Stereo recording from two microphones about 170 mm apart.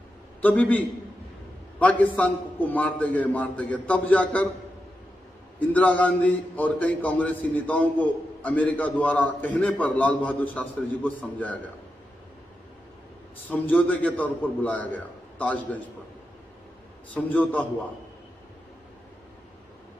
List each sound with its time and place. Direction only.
0.4 s a man's voice: 10° left (ahead or behind)
5.7 s a man's voice: 10° left (ahead or behind)
13.5 s a man's voice: 10° left (ahead or behind)
17.1 s a man's voice: 10° left (ahead or behind)